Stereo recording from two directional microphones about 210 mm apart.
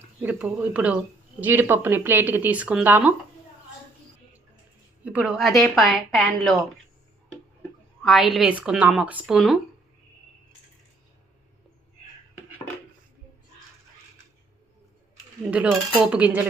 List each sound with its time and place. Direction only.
0.2 s speech: 5° right (ahead or behind)
5.0 s a woman's voice: 5° right (ahead or behind)
8.0 s a woman's voice: centre (ahead or behind)
15.4 s speech: 5° right (ahead or behind)